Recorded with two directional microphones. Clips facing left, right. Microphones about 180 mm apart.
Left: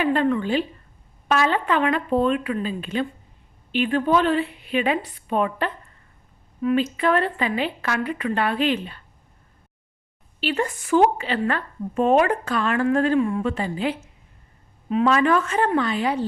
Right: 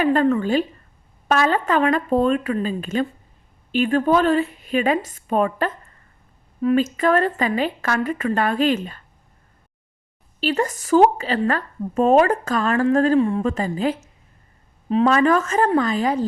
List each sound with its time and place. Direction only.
0.0 s a woman's voice: 45° right (ahead or behind)
10.4 s speech: 40° right (ahead or behind)